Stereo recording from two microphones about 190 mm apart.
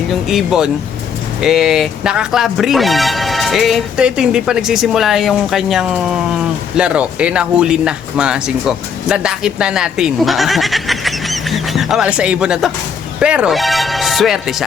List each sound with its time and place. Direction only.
0.1 s speech: centre (ahead or behind)